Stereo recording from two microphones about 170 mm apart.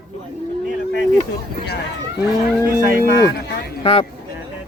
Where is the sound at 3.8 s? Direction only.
40° left (ahead or behind).